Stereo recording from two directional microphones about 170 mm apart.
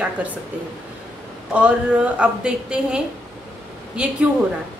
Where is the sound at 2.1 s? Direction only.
5° right (ahead or behind).